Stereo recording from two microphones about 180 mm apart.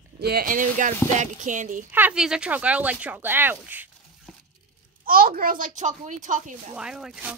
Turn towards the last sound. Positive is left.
turn(degrees=-5)  # may be behind; listen again after turning